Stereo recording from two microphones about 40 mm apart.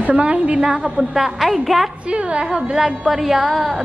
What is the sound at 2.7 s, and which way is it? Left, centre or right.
Speech, centre.